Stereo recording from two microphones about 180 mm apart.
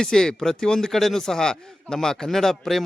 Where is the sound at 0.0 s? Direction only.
5° left (ahead or behind).